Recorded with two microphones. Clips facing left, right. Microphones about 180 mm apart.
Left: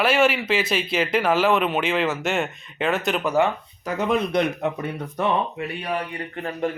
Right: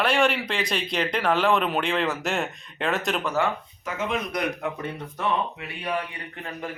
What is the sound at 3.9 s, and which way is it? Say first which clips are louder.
Speech: left 6 dB; 40° left (ahead or behind).